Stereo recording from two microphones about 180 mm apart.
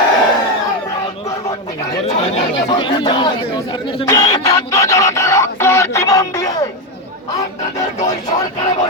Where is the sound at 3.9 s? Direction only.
20° left (ahead or behind).